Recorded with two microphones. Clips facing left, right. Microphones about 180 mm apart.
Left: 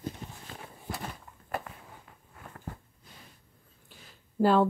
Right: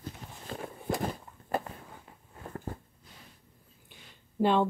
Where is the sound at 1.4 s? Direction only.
30° right (ahead or behind).